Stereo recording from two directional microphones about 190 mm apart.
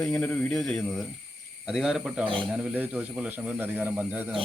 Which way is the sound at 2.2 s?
25° right (ahead or behind).